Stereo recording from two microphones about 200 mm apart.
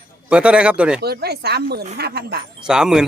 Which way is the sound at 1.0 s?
55° right (ahead or behind).